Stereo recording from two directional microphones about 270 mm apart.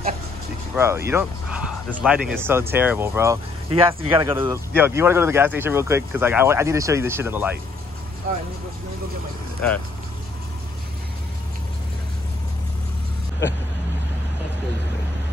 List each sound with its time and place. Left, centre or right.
0.7 s speech: centre
3.7 s speech: centre